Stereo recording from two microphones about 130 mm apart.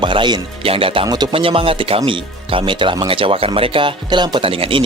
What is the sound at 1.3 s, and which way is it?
Speech, 45° right (ahead or behind).